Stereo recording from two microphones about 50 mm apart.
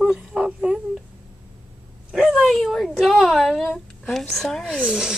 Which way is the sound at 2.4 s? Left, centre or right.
Centre.